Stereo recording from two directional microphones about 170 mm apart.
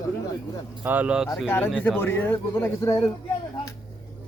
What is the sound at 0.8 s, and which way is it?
Speech, 10° right (ahead or behind).